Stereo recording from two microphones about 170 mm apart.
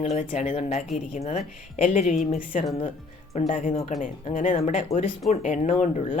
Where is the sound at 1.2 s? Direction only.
45° left (ahead or behind).